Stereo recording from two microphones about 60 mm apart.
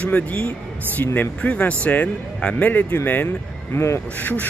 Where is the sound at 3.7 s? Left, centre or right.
Left.